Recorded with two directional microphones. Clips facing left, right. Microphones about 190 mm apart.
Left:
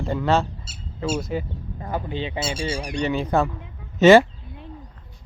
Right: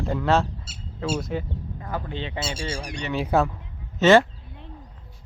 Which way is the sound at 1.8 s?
20° left (ahead or behind).